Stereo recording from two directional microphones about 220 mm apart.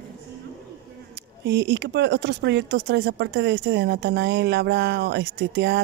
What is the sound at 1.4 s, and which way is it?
Speech, 50° right (ahead or behind).